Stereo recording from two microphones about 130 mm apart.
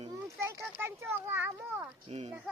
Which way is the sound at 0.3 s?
20° right (ahead or behind).